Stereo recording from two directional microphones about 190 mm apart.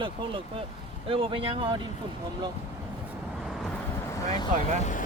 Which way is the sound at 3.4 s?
Centre (ahead or behind).